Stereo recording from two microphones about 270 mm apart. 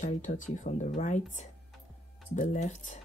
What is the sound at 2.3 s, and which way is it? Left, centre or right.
Speech, left.